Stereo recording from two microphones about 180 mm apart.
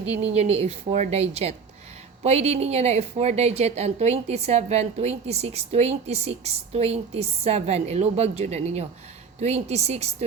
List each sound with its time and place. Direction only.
0.2 s a woman's voice: 35° right (ahead or behind)